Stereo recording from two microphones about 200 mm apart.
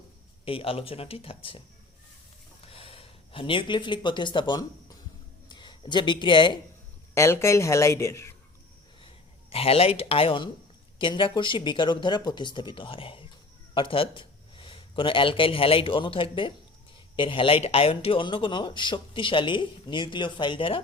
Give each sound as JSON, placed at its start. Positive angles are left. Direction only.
{"t": 0.4, "sound": "speech", "side_deg": 30}
{"t": 2.6, "sound": "a sound", "side_deg": 30}
{"t": 5.5, "sound": "speech", "side_deg": 20}
{"t": 7.1, "sound": "speech", "side_deg": 15}
{"t": 9.5, "sound": "speech", "side_deg": 30}